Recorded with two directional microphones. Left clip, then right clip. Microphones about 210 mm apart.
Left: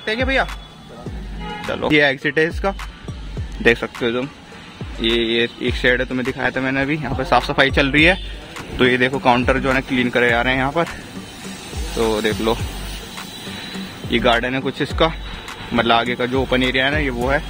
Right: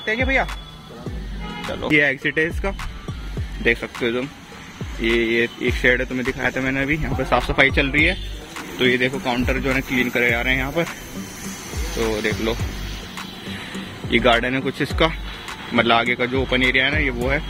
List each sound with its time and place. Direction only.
0.0 s speech: 5° left (ahead or behind)
1.9 s speech: 15° left (ahead or behind)
5.0 s speech: centre (ahead or behind); by 10.9 s 20° left (ahead or behind)
11.9 s speech: 15° left (ahead or behind)
14.3 s speech: 10° left (ahead or behind)